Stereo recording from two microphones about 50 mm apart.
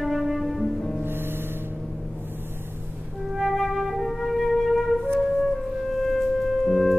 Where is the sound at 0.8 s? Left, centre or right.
Centre.